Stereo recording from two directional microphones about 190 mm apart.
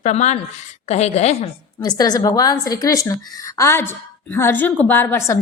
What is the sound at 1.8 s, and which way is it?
A woman's voice, 20° left (ahead or behind).